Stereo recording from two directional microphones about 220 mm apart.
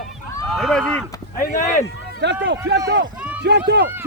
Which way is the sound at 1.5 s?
35° left (ahead or behind).